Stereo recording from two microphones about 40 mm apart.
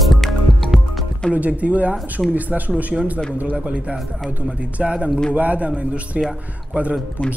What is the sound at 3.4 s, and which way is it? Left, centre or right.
Speech, right.